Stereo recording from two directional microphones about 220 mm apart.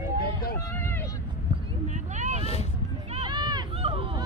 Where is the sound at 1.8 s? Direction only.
35° right (ahead or behind).